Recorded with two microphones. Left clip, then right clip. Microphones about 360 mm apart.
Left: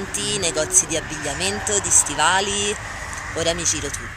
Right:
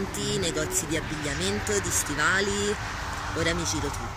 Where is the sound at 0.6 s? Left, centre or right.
Left.